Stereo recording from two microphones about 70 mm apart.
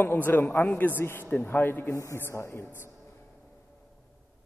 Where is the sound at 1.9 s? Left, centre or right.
Left.